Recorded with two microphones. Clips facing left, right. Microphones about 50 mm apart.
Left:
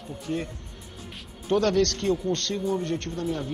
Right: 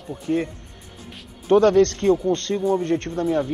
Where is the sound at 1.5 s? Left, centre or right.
Right.